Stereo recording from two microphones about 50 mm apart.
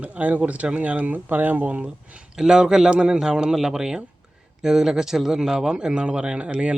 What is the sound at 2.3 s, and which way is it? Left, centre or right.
A man's voice, centre.